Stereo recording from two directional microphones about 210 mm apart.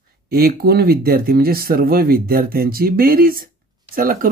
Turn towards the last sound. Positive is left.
turn(degrees=-40)  # may be behind; listen again after turning